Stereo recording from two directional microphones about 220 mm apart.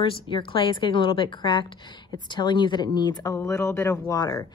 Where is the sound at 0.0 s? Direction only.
25° left (ahead or behind).